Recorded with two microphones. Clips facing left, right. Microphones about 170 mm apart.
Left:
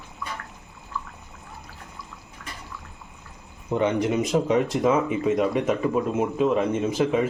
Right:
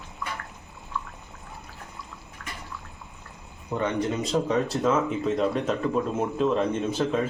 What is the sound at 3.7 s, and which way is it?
Speech, 15° left (ahead or behind).